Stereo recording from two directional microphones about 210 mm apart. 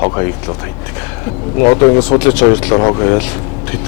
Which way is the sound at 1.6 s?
15° left (ahead or behind).